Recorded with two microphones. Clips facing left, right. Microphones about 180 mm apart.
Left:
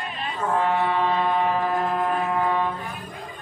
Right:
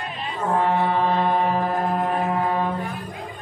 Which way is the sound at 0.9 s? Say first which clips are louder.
Right 2 dB; 45° right (ahead or behind).